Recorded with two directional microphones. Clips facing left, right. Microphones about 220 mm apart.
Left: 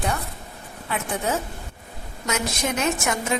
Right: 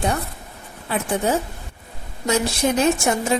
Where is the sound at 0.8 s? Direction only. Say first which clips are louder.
Right 5 dB; 35° right (ahead or behind).